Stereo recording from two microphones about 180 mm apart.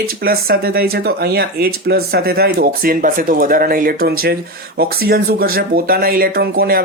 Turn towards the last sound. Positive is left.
turn(degrees=-60)  # may be behind; listen again after turning